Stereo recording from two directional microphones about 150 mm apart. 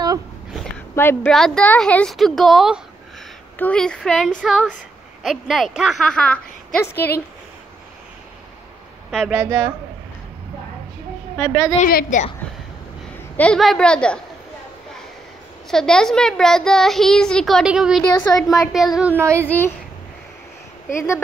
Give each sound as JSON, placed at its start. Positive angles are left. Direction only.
{"t": 0.9, "sound": "a woman's voice", "side_deg": 15}
{"t": 9.1, "sound": "speech", "side_deg": -10}
{"t": 11.8, "sound": "a woman's voice", "side_deg": 65}
{"t": 13.4, "sound": "a woman's voice", "side_deg": 5}
{"t": 15.7, "sound": "a child's voice", "side_deg": 5}
{"t": 19.4, "sound": "a woman's voice", "side_deg": 10}